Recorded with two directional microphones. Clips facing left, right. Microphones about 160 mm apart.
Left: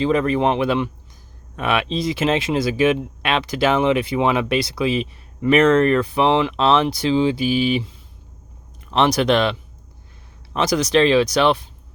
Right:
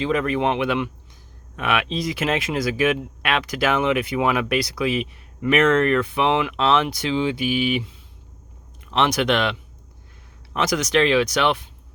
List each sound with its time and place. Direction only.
0.0 s speech: 35° left (ahead or behind)
8.9 s speech: 35° left (ahead or behind)